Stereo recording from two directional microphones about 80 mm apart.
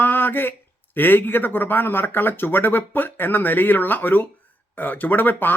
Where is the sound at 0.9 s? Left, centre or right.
Left.